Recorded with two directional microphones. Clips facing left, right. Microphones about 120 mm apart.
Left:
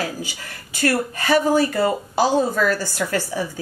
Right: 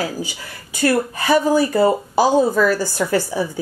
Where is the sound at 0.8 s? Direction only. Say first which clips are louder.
Right 3 dB; 15° right (ahead or behind).